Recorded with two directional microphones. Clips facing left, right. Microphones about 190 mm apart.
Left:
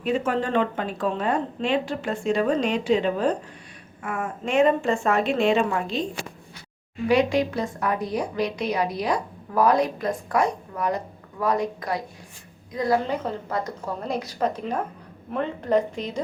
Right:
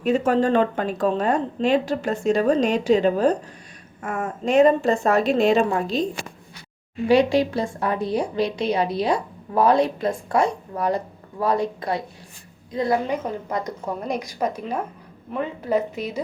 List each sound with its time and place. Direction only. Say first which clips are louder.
0.0 s speech: right 5 dB; 40° right (ahead or behind)
7.1 s a woman's voice: right 3 dB; 30° right (ahead or behind); by 16.2 s 10° right (ahead or behind)